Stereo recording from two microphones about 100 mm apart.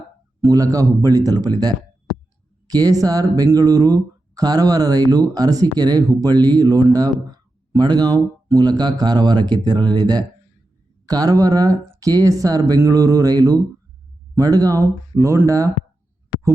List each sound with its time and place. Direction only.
0.4 s speech: 35° right (ahead or behind)